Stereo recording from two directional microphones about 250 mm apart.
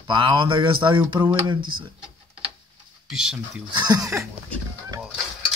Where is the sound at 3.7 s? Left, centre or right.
Centre.